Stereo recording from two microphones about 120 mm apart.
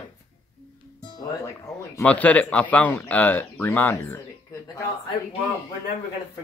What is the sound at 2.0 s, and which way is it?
Speech, 10° left (ahead or behind).